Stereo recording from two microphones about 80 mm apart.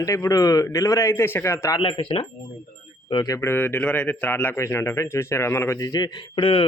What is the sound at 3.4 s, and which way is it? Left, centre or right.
Speech, left.